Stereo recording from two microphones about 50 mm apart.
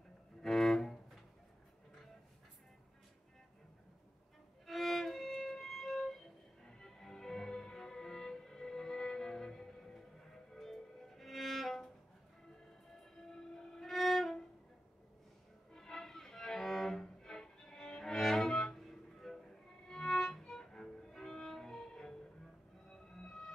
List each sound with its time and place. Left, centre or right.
0.4 s music: centre
4.6 s violin: centre
6.6 s music: centre
13.3 s violin: centre
15.7 s music: centre
19.9 s violin: centre
22.8 s music: centre